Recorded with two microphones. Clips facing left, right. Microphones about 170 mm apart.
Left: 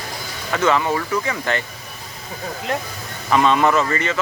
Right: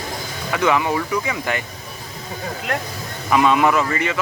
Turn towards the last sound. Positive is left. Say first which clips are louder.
# left 1 dB
turn(degrees=-10)  # may be behind; listen again after turning